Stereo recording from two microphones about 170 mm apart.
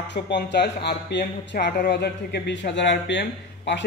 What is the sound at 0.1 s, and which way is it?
Speech, 90° left.